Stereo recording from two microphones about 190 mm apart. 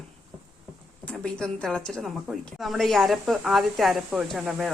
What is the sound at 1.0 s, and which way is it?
Speech, 5° left (ahead or behind).